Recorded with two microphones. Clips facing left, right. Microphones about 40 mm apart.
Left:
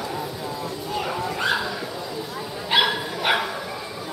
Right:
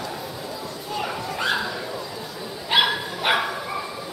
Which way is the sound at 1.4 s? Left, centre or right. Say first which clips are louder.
Even; centre.